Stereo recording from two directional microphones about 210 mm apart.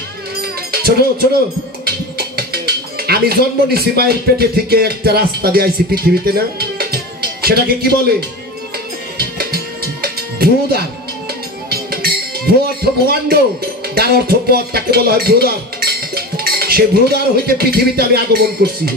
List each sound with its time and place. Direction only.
0.4 s cowbell: 45° right (ahead or behind)
1.9 s speech: 45° right (ahead or behind)
10.0 s music: 45° right (ahead or behind)
13.0 s a man's voice: 45° right (ahead or behind)
13.9 s music: 45° right (ahead or behind)